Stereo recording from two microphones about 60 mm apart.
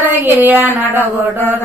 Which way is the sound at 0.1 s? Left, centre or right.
Right.